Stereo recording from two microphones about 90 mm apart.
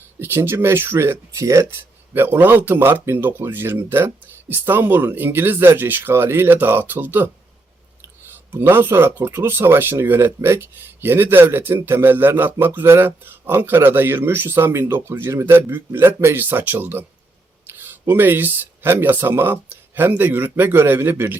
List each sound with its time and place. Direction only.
0.2 s speech: 25° right (ahead or behind)
2.1 s speech: 25° right (ahead or behind)
8.3 s speech: 25° right (ahead or behind)